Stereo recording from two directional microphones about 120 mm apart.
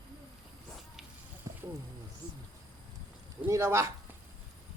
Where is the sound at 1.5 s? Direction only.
25° right (ahead or behind).